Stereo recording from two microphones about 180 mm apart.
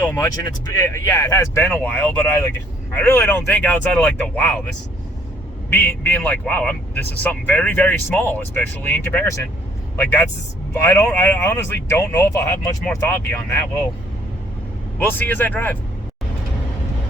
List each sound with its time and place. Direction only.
0.1 s speech: 15° left (ahead or behind)
5.7 s speech: 10° left (ahead or behind)
14.9 s speech: 10° left (ahead or behind)